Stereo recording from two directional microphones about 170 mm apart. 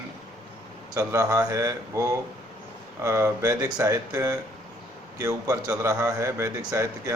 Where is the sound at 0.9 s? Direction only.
20° right (ahead or behind).